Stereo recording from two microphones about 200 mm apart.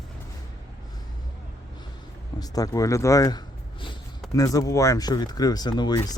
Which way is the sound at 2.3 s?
20° left (ahead or behind).